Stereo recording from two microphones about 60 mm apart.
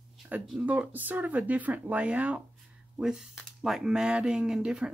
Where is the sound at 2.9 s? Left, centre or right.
Centre.